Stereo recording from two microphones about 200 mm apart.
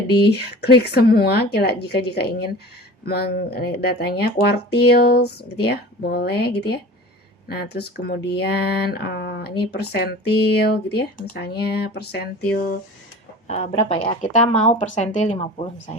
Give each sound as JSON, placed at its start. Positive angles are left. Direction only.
{"t": 0.2, "sound": "speech", "side_deg": 55}
{"t": 13.5, "sound": "speech", "side_deg": 30}